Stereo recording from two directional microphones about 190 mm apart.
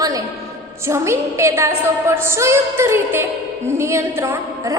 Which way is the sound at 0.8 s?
15° right (ahead or behind).